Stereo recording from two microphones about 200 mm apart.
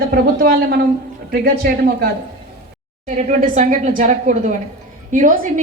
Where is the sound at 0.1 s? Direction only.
50° right (ahead or behind).